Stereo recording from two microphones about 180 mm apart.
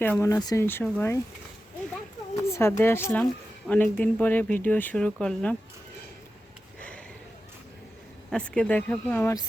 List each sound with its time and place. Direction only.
0.0 s speech: 15° left (ahead or behind)
2.5 s speech: 15° left (ahead or behind)
6.7 s a sound: 5° left (ahead or behind)
8.3 s speech: 5° left (ahead or behind)